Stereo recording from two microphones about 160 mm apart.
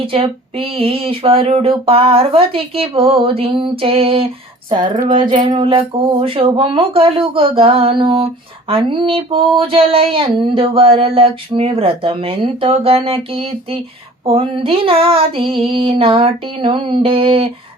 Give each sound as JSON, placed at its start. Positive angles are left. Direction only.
{"t": 0.0, "sound": "speech", "side_deg": -35}